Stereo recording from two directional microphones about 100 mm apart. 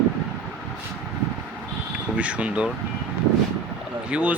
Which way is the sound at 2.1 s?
15° right (ahead or behind).